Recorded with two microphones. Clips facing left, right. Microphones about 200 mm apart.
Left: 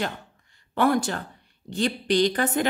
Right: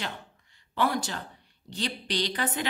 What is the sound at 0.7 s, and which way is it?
A woman's voice, 50° left (ahead or behind).